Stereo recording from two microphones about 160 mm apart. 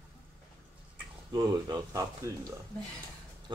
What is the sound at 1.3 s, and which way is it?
Speech, 20° right (ahead or behind).